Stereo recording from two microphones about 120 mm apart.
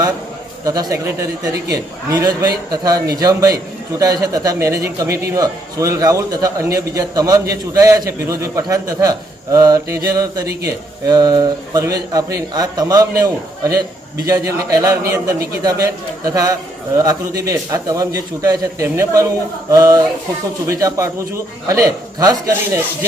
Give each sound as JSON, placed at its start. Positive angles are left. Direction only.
{"t": 0.6, "sound": "a man's voice", "side_deg": -30}